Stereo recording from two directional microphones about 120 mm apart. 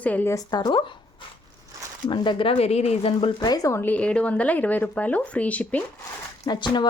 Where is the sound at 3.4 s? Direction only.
35° left (ahead or behind).